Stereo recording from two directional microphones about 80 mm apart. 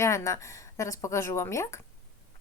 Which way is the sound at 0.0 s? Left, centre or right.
Left.